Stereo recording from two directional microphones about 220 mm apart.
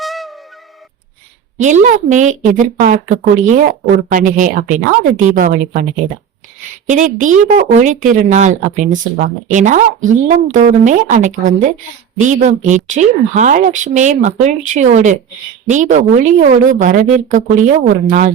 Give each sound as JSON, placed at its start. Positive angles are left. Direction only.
{"t": 0.0, "sound": "music", "side_deg": 0}
{"t": 1.5, "sound": "speech", "side_deg": -35}
{"t": 6.8, "sound": "speech", "side_deg": -35}